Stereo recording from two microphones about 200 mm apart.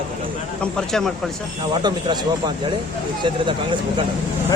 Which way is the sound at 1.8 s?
20° right (ahead or behind).